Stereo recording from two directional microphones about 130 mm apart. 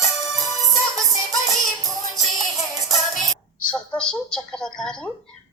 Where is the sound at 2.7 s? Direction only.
25° left (ahead or behind).